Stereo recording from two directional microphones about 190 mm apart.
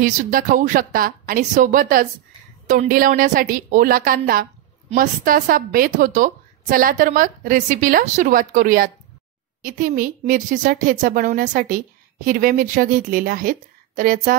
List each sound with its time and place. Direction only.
0.0 s a woman's voice: 45° right (ahead or behind)